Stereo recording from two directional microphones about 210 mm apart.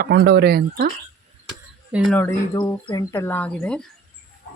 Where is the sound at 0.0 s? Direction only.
50° right (ahead or behind).